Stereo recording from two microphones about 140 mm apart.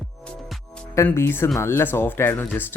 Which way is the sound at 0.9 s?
15° left (ahead or behind).